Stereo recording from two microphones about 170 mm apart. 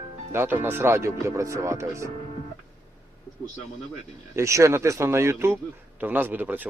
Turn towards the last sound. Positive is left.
turn(degrees=-10)  # may be behind; listen again after turning